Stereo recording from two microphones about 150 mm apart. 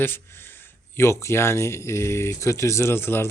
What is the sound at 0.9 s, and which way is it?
Speech, 20° left (ahead or behind).